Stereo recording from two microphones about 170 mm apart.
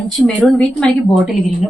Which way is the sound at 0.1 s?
Centre (ahead or behind).